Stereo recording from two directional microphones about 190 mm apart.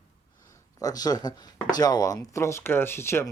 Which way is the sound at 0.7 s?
20° left (ahead or behind).